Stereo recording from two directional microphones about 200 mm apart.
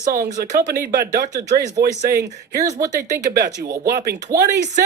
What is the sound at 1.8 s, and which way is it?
Speech, 50° right (ahead or behind).